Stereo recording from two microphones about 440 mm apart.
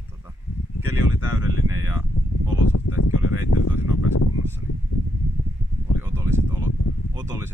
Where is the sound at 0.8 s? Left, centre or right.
Centre.